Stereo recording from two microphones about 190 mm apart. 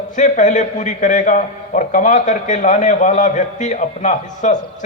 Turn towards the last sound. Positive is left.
turn(degrees=40)  # may be behind; listen again after turning